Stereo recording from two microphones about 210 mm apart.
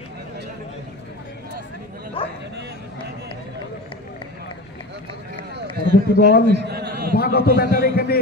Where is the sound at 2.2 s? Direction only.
25° left (ahead or behind).